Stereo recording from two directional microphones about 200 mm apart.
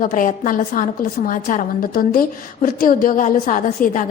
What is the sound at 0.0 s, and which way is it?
A woman's voice, 40° left (ahead or behind).